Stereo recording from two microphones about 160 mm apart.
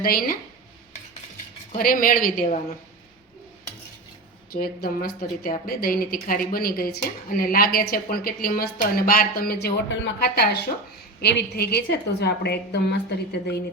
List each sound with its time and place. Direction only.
0.0 s a woman's voice: 65° left (ahead or behind)
1.8 s a woman's voice: 60° left (ahead or behind)
4.5 s a woman's voice: 70° left (ahead or behind); by 13.6 s 90° left